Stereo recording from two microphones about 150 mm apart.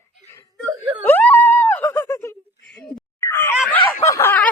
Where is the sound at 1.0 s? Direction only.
10° left (ahead or behind).